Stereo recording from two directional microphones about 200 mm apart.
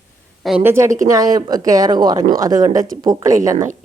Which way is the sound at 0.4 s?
5° right (ahead or behind).